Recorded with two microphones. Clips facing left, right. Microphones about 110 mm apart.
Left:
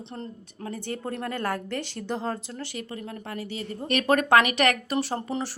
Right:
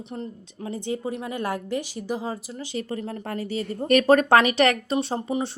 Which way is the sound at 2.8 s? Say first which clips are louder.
Right 5 dB; 35° right (ahead or behind).